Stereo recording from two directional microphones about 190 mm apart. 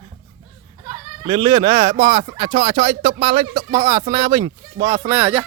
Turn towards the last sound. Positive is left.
turn(degrees=-10)  # may be behind; listen again after turning